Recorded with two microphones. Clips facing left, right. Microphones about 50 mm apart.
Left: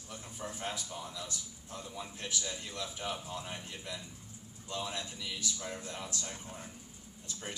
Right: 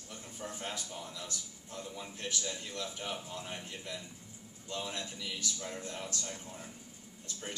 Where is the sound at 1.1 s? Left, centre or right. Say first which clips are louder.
Left 1 dB; left.